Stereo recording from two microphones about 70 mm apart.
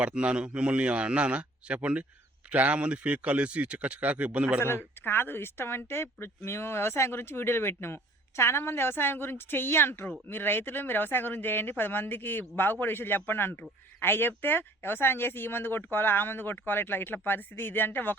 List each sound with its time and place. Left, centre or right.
0.0 s a man's voice: centre
5.0 s a man's voice: left